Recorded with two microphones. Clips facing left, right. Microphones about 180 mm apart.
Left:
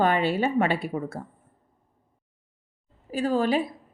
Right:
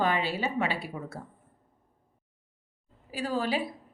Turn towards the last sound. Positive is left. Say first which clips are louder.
# left 6 dB
turn(degrees=45)  # may be behind; listen again after turning